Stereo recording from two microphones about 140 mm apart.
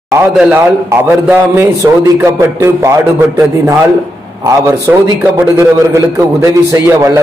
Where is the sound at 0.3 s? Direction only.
5° right (ahead or behind).